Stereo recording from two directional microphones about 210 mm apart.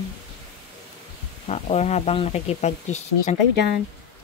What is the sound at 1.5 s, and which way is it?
Speech, 30° left (ahead or behind).